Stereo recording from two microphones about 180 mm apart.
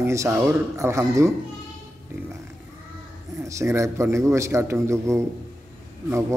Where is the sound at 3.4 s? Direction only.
15° right (ahead or behind).